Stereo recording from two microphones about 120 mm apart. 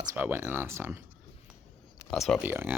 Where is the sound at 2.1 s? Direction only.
5° left (ahead or behind).